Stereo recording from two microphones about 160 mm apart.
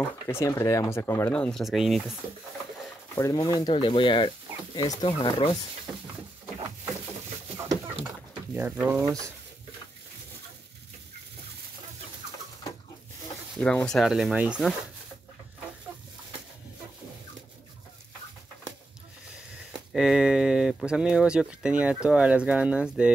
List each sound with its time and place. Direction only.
0.3 s speech: 15° left (ahead or behind)
1.3 s speech: 5° left (ahead or behind)
3.2 s speech: 25° left (ahead or behind)
7.5 s chicken: 20° right (ahead or behind)
8.5 s speech: 10° right (ahead or behind)
13.6 s speech: 5° left (ahead or behind)
19.7 s speech: 5° right (ahead or behind)